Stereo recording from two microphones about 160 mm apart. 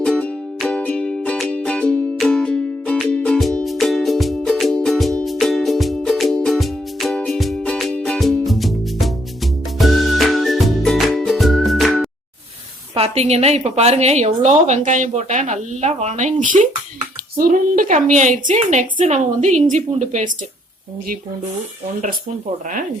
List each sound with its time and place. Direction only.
0.0 s music: 5° left (ahead or behind)
12.9 s a woman's voice: 40° right (ahead or behind)